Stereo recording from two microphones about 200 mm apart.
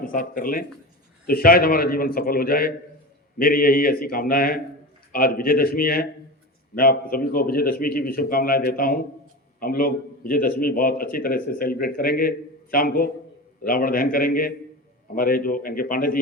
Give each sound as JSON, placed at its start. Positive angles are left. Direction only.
{"t": 0.0, "sound": "a man's voice", "side_deg": 45}